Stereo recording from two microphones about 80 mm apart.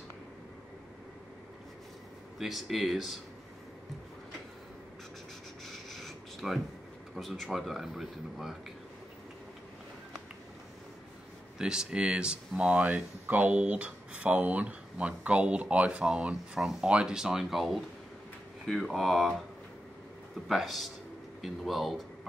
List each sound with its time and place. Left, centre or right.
2.3 s speech: centre
5.7 s writing: centre
7.2 s speech: centre
11.5 s speech: centre
20.4 s speech: centre